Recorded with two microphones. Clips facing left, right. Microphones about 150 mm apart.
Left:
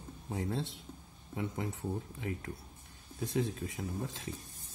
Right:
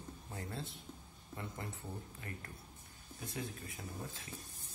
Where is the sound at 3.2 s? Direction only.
80° left.